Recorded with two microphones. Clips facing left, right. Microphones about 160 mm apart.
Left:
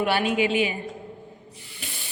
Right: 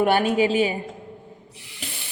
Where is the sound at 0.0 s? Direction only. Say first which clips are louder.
Right 4 dB; 45° right (ahead or behind).